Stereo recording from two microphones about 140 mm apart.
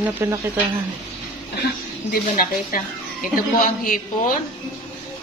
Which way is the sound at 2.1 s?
85° left.